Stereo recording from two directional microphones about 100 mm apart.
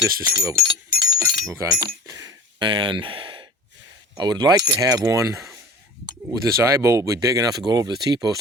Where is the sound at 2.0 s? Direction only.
35° right (ahead or behind).